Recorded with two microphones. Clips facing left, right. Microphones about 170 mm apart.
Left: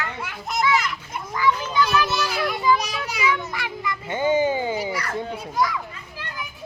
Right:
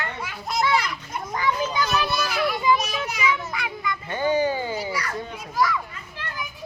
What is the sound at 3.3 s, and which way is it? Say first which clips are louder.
Speech: left 1 dB; centre (ahead or behind).